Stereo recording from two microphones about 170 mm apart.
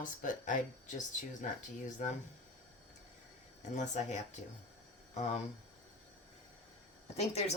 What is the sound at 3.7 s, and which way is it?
Speech, 45° left (ahead or behind).